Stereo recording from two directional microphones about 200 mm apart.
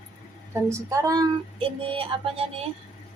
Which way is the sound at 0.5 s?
15° right (ahead or behind).